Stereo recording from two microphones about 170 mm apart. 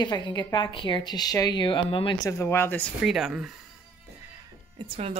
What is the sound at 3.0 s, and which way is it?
Speech, centre (ahead or behind).